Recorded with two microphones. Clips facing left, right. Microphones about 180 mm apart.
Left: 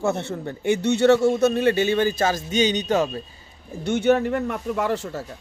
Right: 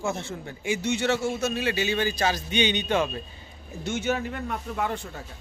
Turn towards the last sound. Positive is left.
turn(degrees=80)